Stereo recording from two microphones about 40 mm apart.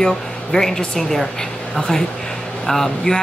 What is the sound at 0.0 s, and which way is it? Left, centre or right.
Speech, centre.